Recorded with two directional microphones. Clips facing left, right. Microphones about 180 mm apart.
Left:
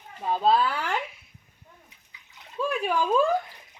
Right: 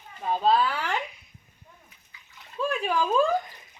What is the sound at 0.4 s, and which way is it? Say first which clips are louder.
Speech: even; 10° left (ahead or behind).